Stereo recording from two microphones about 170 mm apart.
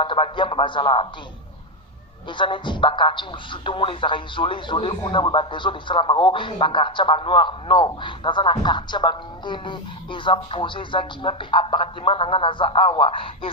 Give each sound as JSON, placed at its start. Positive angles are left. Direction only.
{"t": 0.0, "sound": "a man's voice", "side_deg": 30}
{"t": 2.4, "sound": "a man's voice", "side_deg": 30}